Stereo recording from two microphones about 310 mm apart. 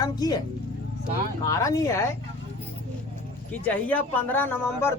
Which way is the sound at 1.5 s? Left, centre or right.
Centre.